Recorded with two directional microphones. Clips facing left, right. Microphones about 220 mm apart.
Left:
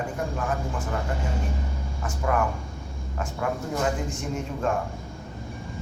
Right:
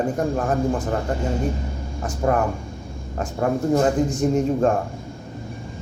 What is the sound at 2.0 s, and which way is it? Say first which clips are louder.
Speech: right 5 dB; 35° right (ahead or behind).